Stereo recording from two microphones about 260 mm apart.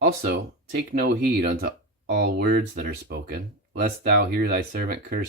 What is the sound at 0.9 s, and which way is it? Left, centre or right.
Speech, right.